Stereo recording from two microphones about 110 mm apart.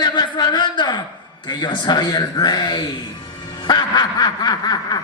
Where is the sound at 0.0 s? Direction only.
40° left (ahead or behind).